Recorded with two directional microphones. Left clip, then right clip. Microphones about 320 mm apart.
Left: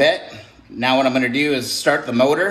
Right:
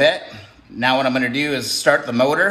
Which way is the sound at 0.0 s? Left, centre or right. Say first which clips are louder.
Even; centre.